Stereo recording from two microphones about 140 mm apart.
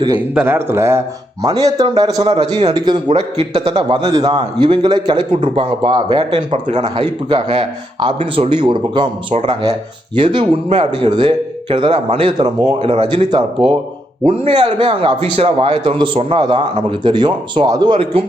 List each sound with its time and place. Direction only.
0.3 s a man's voice: 15° right (ahead or behind); by 9.0 s 35° right (ahead or behind)
10.2 s a man's voice: 35° right (ahead or behind)